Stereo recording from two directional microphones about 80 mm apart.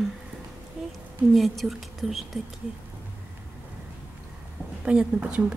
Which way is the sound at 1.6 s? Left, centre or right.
Centre.